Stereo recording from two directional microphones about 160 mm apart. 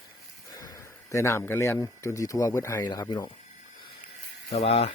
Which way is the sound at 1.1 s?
15° left (ahead or behind).